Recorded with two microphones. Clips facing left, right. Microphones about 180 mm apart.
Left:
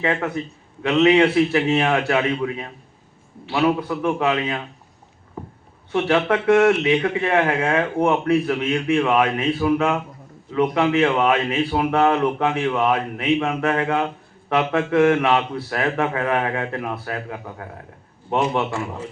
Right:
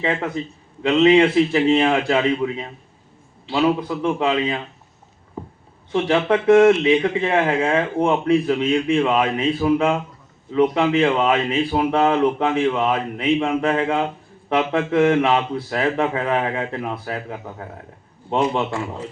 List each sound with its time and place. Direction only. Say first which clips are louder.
0.8 s a man's voice: right 1 dB; 30° right (ahead or behind)
5.9 s a man's voice: right 1 dB; 20° right (ahead or behind)